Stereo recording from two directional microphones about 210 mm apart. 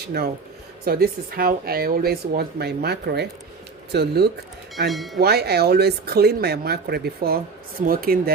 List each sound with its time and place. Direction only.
0.1 s speech: 50° right (ahead or behind)
4.9 s speech: centre (ahead or behind)
5.2 s speech: 50° right (ahead or behind)